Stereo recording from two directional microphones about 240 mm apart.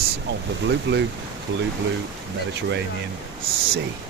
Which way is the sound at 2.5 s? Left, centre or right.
Right.